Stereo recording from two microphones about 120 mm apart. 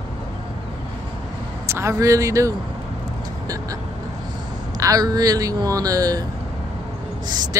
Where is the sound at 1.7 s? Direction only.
25° right (ahead or behind).